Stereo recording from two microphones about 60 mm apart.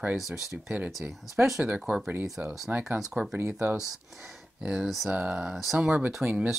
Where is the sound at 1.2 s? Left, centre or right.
Centre.